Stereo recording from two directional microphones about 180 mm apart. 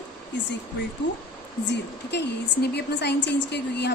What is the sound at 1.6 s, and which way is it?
A woman's voice, 70° left (ahead or behind).